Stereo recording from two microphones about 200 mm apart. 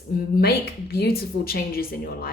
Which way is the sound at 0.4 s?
50° left (ahead or behind).